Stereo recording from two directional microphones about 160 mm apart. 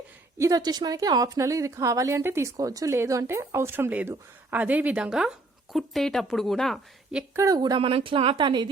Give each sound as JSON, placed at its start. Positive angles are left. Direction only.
{"t": 0.3, "sound": "a woman's voice", "side_deg": -20}
{"t": 7.3, "sound": "a woman's voice", "side_deg": -20}